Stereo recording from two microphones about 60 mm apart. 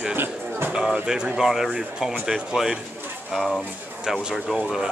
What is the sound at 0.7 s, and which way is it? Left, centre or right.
Speech, centre.